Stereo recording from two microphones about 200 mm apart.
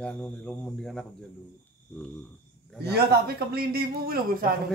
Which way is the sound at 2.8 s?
55° right (ahead or behind).